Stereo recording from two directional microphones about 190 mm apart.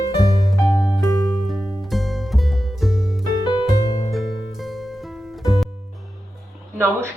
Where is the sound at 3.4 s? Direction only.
20° left (ahead or behind).